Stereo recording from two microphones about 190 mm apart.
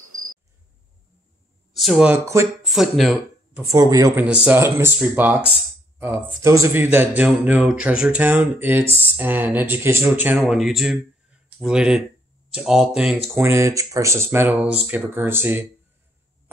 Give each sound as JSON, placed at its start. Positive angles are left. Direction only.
{"t": 1.8, "sound": "speech", "side_deg": -5}
{"t": 2.7, "sound": "speech", "side_deg": 0}
{"t": 3.6, "sound": "speech", "side_deg": -20}
{"t": 13.5, "sound": "speech", "side_deg": -15}